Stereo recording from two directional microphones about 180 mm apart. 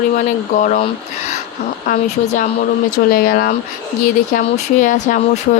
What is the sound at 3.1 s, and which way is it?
Speech, 55° left (ahead or behind).